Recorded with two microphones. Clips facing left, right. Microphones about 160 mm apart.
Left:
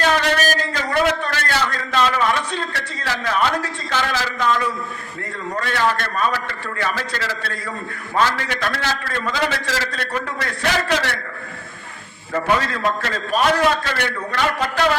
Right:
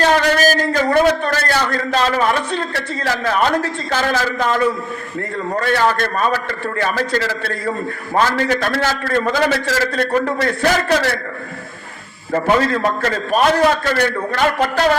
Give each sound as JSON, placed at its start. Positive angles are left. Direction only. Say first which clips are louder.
{"t": 0.0, "sound": "a man's voice", "louder": "right 4 dB", "side_deg": -35}
{"t": 12.3, "sound": "a man's voice", "louder": "right 5 dB", "side_deg": -35}